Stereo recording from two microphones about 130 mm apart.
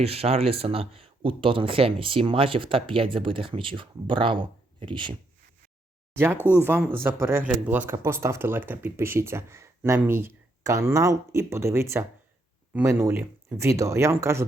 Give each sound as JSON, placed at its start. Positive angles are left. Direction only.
{"t": 0.0, "sound": "speech", "side_deg": -50}
{"t": 6.5, "sound": "speech", "side_deg": -15}